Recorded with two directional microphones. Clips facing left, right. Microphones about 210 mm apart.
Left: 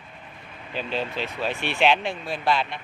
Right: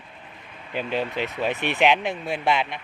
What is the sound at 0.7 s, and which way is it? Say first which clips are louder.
Speech: right 2 dB; 15° right (ahead or behind).